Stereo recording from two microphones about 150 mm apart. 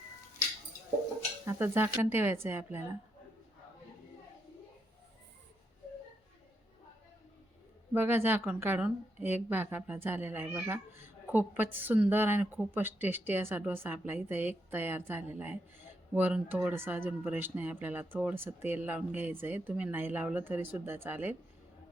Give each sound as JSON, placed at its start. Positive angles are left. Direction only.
{"t": 1.5, "sound": "a woman's voice", "side_deg": -15}
{"t": 7.9, "sound": "a woman's voice", "side_deg": -15}